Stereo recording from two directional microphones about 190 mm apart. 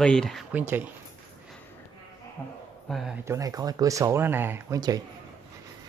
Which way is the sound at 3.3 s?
20° right (ahead or behind).